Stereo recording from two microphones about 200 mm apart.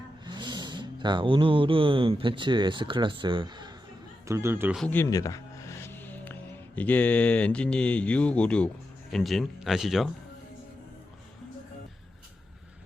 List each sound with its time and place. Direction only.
0.3 s speech: 20° right (ahead or behind)
4.8 s speech: 10° left (ahead or behind)